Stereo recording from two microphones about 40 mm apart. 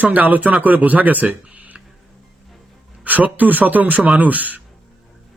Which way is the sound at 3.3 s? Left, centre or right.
Right.